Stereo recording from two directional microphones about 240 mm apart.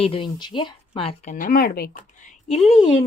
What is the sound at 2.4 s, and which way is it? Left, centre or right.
Speech, centre.